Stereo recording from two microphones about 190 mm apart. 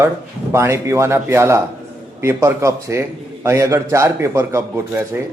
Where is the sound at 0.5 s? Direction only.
15° right (ahead or behind).